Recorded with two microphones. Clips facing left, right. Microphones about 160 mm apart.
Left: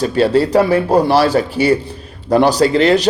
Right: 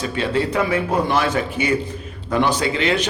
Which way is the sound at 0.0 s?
40° left (ahead or behind).